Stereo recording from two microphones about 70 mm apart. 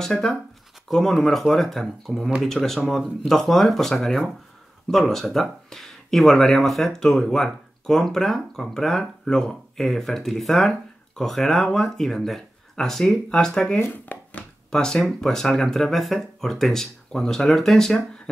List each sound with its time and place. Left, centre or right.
0.0 s speech: centre
13.7 s a sound: left
14.7 s speech: centre